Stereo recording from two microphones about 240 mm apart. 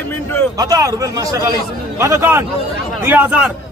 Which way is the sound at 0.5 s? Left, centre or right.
Centre.